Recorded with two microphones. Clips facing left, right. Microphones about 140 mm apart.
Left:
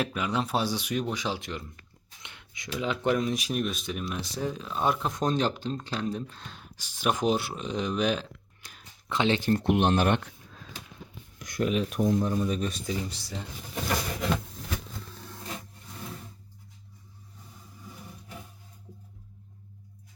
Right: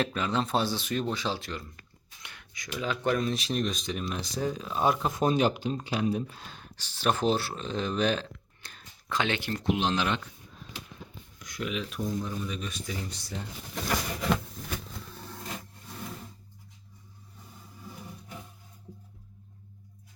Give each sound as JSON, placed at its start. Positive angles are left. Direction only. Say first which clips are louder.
{"t": 0.0, "sound": "speech", "louder": "even", "side_deg": 10}
{"t": 6.7, "sound": "speech", "louder": "even", "side_deg": 10}
{"t": 9.0, "sound": "speech", "louder": "left 4 dB", "side_deg": 25}
{"t": 9.6, "sound": "speech", "louder": "left 3 dB", "side_deg": 55}
{"t": 11.3, "sound": "speech", "louder": "left 7 dB", "side_deg": 45}
{"t": 11.9, "sound": "speech", "louder": "left 8 dB", "side_deg": 65}
{"t": 12.4, "sound": "speech", "louder": "left 7 dB", "side_deg": 40}
{"t": 13.1, "sound": "speech", "louder": "even", "side_deg": 0}